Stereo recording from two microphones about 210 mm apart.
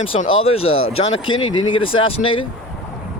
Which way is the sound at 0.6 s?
75° left (ahead or behind).